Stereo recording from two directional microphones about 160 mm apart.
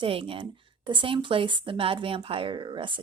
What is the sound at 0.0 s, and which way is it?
Speech, 35° right (ahead or behind).